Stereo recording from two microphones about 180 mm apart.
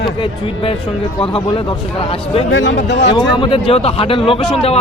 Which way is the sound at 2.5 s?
90° left.